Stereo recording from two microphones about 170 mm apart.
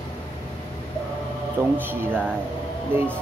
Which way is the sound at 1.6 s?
10° right (ahead or behind).